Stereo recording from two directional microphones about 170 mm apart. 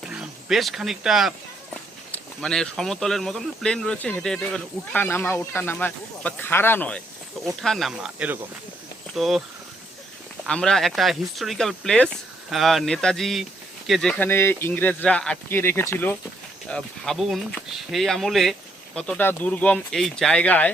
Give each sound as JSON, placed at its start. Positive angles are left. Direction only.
{"t": 0.1, "sound": "speech", "side_deg": -5}
{"t": 10.4, "sound": "speech", "side_deg": 5}